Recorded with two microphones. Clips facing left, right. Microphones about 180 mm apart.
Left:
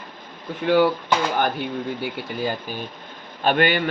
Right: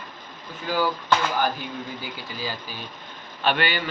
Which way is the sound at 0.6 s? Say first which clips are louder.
Left 8 dB; 65° left (ahead or behind).